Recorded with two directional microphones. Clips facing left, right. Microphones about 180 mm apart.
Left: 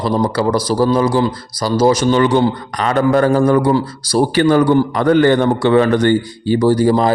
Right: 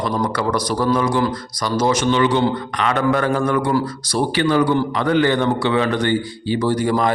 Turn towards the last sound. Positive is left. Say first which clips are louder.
# left 6 dB
turn(degrees=35)  # may be behind; listen again after turning